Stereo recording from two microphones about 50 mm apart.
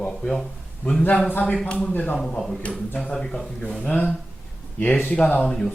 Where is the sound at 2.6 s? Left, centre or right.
Left.